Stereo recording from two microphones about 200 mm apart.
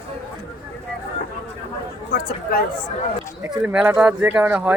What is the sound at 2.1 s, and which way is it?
Speech, 45° left (ahead or behind).